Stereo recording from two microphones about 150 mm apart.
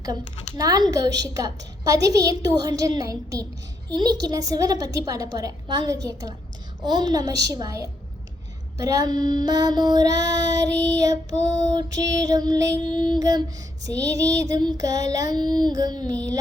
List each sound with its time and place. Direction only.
0.5 s female singing: 25° right (ahead or behind)